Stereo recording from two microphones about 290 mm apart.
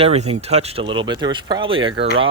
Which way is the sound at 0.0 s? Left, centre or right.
Right.